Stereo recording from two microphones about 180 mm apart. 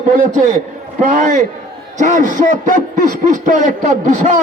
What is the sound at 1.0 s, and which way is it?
A man's voice, 45° right (ahead or behind).